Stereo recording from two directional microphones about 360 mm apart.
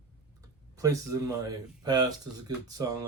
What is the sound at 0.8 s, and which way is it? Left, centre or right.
Speech, centre.